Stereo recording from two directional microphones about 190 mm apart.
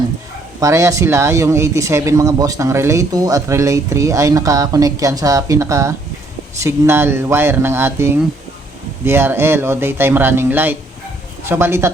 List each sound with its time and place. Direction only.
0.6 s speech: 15° right (ahead or behind)